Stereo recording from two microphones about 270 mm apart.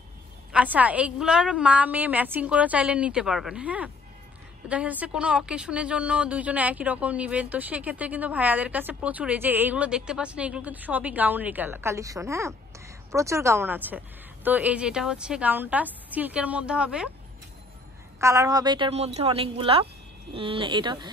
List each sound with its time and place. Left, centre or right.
0.5 s a woman's voice: centre
18.2 s a woman's voice: centre